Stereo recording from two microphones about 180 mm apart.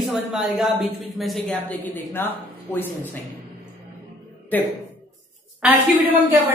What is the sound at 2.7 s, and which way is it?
Speech, 10° left (ahead or behind).